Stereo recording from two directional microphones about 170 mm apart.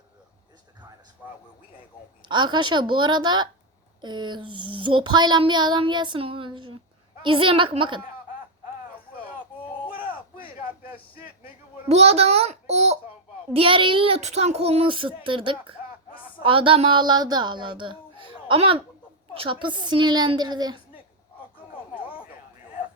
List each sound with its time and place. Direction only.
2.2 s child singing: 25° right (ahead or behind)
11.9 s a child's voice: 40° right (ahead or behind)
16.4 s child singing: 30° right (ahead or behind)